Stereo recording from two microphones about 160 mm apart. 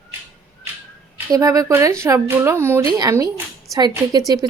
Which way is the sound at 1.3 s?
20° right (ahead or behind).